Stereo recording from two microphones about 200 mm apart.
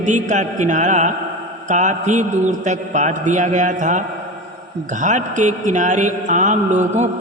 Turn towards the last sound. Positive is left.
turn(degrees=-35)  # may be behind; listen again after turning